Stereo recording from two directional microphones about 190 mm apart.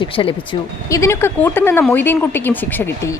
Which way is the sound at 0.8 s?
15° left (ahead or behind).